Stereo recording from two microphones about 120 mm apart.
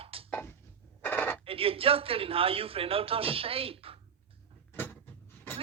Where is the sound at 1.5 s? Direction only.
50° right (ahead or behind).